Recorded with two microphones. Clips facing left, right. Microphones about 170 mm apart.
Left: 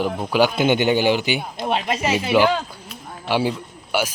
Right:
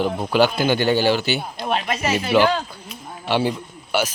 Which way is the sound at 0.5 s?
20° left (ahead or behind).